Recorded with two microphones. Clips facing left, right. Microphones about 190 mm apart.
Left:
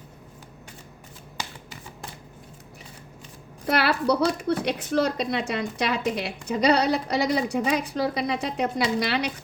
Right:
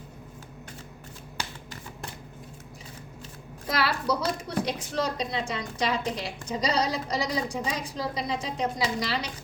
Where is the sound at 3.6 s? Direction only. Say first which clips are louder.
Left 5 dB; 65° left (ahead or behind).